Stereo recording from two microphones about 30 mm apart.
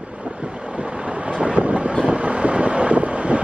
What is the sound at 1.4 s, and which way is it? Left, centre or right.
Vehicle, right.